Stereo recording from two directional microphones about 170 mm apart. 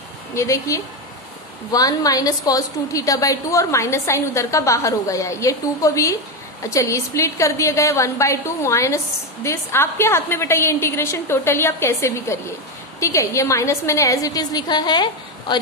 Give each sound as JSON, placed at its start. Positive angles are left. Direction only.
{"t": 0.3, "sound": "a woman's voice", "side_deg": 15}